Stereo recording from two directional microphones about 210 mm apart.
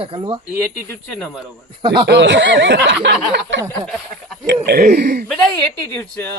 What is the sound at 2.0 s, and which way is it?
Speech, 55° right (ahead or behind).